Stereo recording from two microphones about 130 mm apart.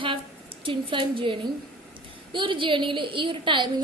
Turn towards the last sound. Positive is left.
turn(degrees=-40)  # may be behind; listen again after turning